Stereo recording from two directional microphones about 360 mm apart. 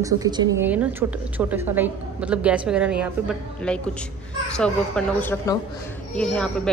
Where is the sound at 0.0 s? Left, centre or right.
Centre.